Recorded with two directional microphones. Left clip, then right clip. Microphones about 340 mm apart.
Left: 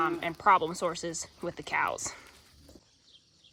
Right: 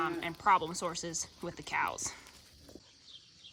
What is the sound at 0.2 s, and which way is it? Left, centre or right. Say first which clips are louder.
Speech: left 3 dB; centre.